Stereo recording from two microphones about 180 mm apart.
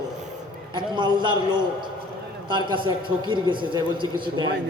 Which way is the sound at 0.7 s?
25° right (ahead or behind).